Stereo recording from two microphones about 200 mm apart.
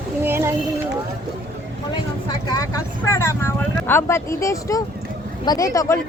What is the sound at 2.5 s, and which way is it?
Speech, 15° left (ahead or behind).